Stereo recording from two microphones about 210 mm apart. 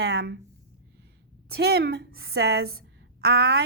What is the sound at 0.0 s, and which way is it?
Speech, 50° right (ahead or behind).